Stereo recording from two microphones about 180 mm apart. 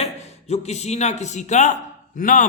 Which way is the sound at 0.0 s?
35° left (ahead or behind).